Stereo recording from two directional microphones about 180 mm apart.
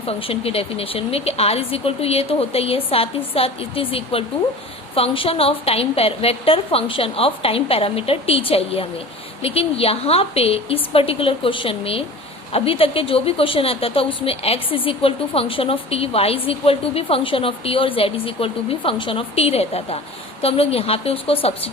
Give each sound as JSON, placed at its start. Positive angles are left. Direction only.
{"t": 0.0, "sound": "a woman's voice", "side_deg": 30}